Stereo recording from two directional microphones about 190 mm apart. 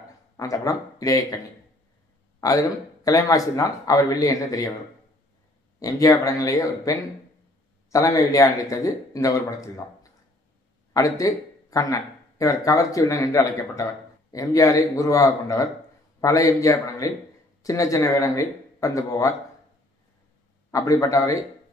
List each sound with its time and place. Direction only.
0.4 s a man's voice: 20° left (ahead or behind)
2.4 s a man's voice: 20° left (ahead or behind)
5.8 s a man's voice: 20° left (ahead or behind)
20.7 s a man's voice: 15° left (ahead or behind)